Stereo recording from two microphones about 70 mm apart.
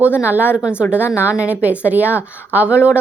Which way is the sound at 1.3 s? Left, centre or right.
Right.